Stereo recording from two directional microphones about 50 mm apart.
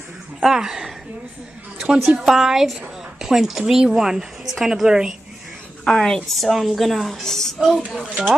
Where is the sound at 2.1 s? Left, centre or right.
Centre.